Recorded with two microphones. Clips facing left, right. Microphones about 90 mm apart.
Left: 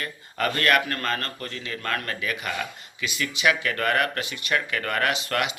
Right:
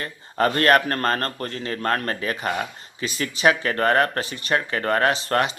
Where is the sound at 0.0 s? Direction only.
35° right (ahead or behind).